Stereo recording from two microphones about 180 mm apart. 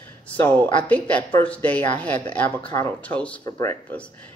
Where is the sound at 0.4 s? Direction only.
10° left (ahead or behind).